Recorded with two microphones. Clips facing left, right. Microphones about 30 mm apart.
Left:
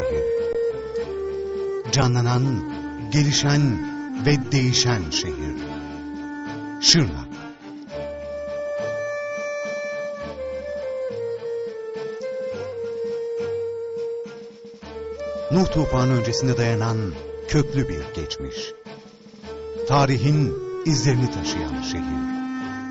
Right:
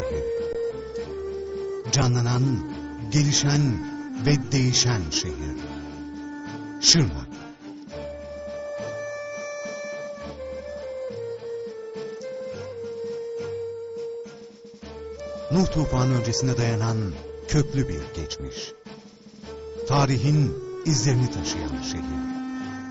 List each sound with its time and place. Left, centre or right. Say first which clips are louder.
0.0 s music: left 5 dB; centre
6.8 s speech: left 2 dB; centre
8.5 s music: left 6 dB; centre
15.3 s speech: left 3 dB; centre
19.8 s speech: left 4 dB; centre
22.3 s music: left 3 dB; centre